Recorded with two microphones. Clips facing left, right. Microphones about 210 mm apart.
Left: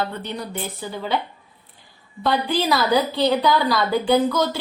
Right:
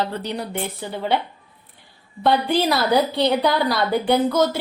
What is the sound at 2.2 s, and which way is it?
Speech, 55° right (ahead or behind).